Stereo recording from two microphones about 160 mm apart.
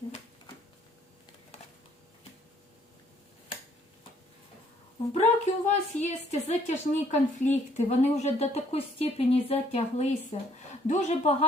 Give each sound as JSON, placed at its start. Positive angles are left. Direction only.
{"t": 5.1, "sound": "a woman's voice", "side_deg": 45}